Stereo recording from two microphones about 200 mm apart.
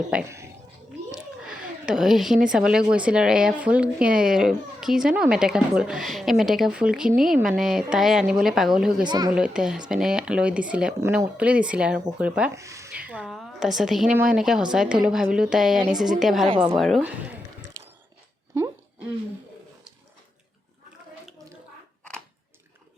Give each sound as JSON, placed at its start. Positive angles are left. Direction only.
{"t": 0.1, "sound": "speech", "side_deg": -10}
{"t": 1.1, "sound": "a sound", "side_deg": -5}
{"t": 2.5, "sound": "speech", "side_deg": -5}
{"t": 9.0, "sound": "speech", "side_deg": -20}
{"t": 9.3, "sound": "speech", "side_deg": -5}